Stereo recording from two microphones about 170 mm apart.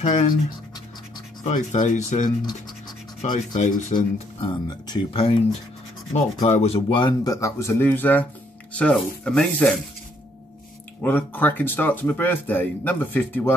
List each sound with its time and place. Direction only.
0.0 s speech: 45° left (ahead or behind)
1.4 s speech: 45° left (ahead or behind)
4.4 s speech: 25° left (ahead or behind)
7.3 s speech: 15° left (ahead or behind)
11.0 s speech: 10° left (ahead or behind)